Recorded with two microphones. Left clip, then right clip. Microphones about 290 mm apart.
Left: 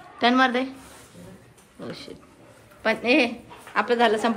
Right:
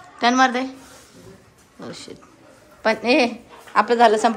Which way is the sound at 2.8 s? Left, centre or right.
Centre.